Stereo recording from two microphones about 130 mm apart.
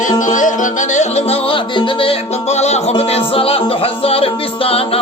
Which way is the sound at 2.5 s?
60° left (ahead or behind).